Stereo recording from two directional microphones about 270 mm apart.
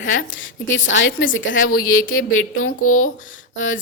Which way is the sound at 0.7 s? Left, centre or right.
Left.